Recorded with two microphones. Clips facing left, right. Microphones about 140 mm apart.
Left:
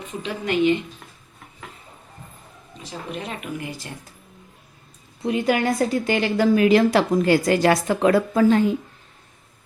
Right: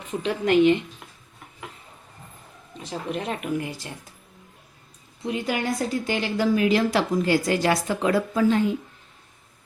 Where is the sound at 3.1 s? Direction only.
50° right (ahead or behind).